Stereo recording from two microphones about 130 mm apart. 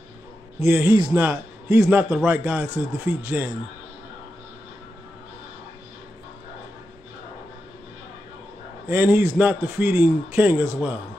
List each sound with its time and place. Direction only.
0.6 s speech: 15° right (ahead or behind)
8.8 s speech: 15° right (ahead or behind)